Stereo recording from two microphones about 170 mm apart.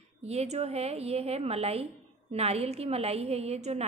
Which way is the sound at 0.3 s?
40° right (ahead or behind).